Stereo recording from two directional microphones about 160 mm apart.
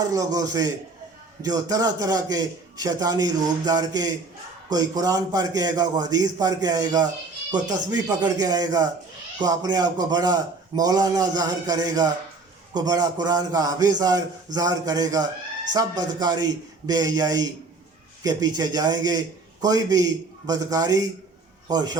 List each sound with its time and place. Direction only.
0.0 s a man's voice: 20° right (ahead or behind)